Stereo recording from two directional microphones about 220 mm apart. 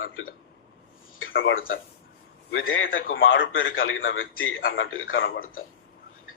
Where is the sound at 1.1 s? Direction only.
65° left (ahead or behind).